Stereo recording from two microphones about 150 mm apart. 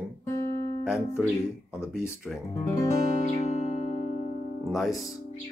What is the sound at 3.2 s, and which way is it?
Music, 50° left (ahead or behind).